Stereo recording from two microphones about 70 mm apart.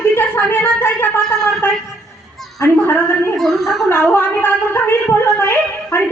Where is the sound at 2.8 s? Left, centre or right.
Left.